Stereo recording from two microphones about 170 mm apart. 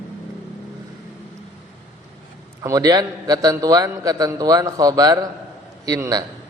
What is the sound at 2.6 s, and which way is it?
A man's voice, 20° right (ahead or behind).